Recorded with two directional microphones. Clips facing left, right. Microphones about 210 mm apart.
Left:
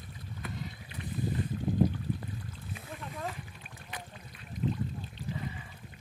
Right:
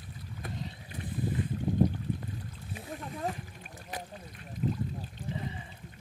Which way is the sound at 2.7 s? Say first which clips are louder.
Right 4 dB; 35° right (ahead or behind).